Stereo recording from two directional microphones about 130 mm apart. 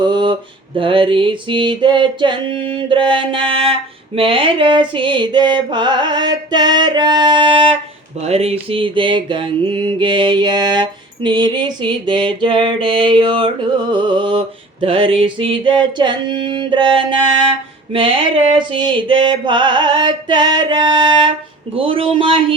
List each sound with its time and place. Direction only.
0.0 s mantra: 35° right (ahead or behind)
0.8 s a sound: 45° right (ahead or behind)
21.8 s a man's voice: 45° right (ahead or behind)